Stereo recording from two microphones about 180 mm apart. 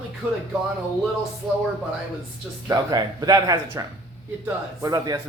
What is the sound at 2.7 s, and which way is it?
Speech, 20° right (ahead or behind).